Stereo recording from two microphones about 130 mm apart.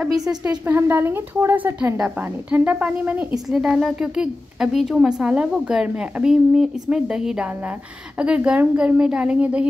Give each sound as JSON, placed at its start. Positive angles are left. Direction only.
{"t": 0.4, "sound": "a woman's voice", "side_deg": -15}